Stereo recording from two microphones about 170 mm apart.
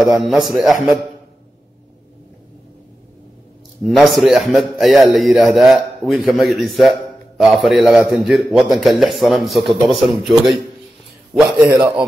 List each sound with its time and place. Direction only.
0.0 s a man's voice: centre (ahead or behind)
3.8 s a man's voice: centre (ahead or behind)